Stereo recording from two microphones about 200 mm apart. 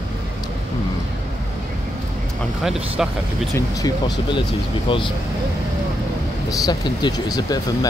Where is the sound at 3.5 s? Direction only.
20° left (ahead or behind).